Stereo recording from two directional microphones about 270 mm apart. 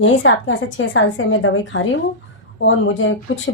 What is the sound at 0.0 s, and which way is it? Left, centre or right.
A woman's voice, left.